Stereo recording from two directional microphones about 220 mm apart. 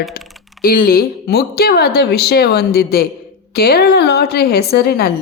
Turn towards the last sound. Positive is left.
turn(degrees=45)  # may be behind; listen again after turning